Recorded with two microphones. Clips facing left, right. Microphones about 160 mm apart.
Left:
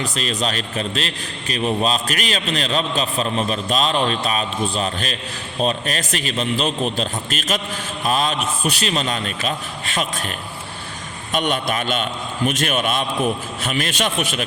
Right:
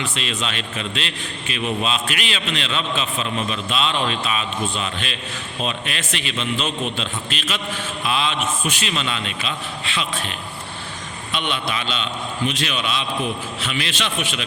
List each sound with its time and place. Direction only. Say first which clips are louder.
0.0 s a man's voice: left 3 dB; 40° left (ahead or behind)
11.3 s a man's voice: left 4 dB; 45° left (ahead or behind)